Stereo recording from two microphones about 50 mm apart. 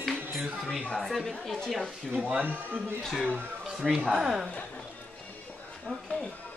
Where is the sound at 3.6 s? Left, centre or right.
Centre.